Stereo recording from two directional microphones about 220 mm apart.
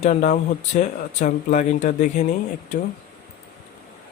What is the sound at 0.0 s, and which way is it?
Speech, 30° left (ahead or behind).